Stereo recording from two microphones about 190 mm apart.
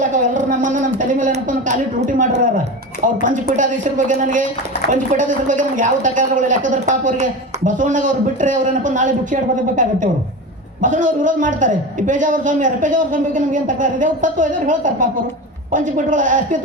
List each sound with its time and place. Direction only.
0.0 s a man's voice: 40° right (ahead or behind)